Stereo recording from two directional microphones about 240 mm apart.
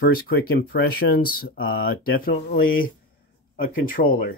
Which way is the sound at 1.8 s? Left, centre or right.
Left.